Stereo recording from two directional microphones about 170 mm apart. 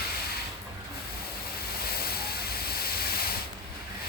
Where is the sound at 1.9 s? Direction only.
65° left (ahead or behind).